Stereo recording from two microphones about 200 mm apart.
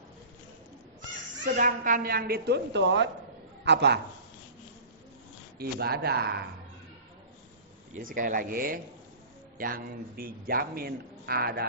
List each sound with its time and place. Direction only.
1.5 s a man's voice: 40° right (ahead or behind); by 4.0 s 60° right (ahead or behind)
5.5 s speech: 50° right (ahead or behind)
7.9 s speech: 40° right (ahead or behind)